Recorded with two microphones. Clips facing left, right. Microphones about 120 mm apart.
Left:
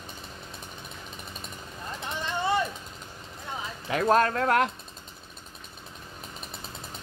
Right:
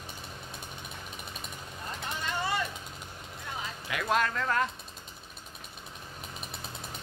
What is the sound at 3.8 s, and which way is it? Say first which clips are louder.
Speech: left 7 dB; 40° left (ahead or behind).